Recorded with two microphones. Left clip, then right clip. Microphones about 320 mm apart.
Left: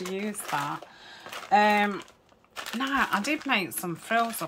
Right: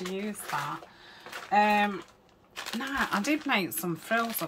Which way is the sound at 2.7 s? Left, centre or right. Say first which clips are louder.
Left 4 dB; centre.